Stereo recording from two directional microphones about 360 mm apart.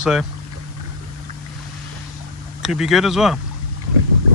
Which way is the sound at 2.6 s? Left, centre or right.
Centre.